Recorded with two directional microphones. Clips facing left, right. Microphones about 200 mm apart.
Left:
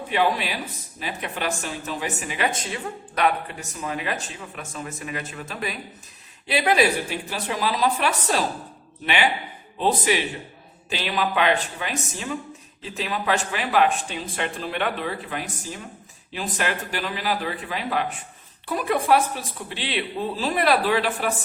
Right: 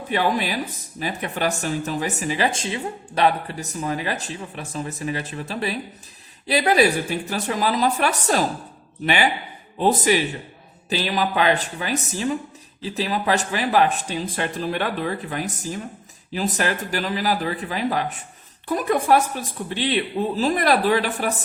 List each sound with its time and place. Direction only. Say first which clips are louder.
0.1 s speech: right 1 dB; 40° right (ahead or behind)